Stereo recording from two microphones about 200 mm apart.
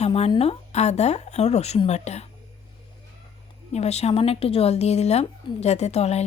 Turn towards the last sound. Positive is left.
turn(degrees=30)  # may be behind; listen again after turning